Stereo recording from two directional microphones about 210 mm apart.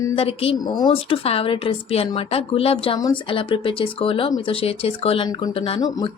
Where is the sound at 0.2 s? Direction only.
25° left (ahead or behind).